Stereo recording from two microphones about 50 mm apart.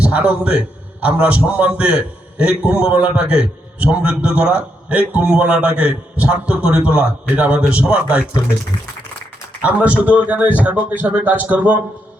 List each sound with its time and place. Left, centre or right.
0.0 s a man's voice: right
9.6 s a man's voice: right